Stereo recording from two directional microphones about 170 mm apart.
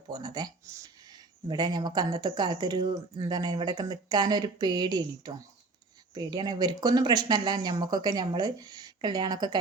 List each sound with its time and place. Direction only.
0.1 s speech: 25° right (ahead or behind)